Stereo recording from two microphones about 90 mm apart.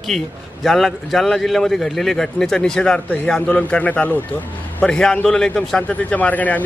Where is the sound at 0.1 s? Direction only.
5° left (ahead or behind).